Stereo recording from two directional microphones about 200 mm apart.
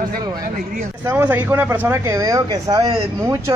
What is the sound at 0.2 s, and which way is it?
Speech, 20° right (ahead or behind).